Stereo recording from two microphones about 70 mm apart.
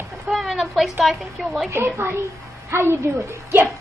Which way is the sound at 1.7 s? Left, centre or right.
Right.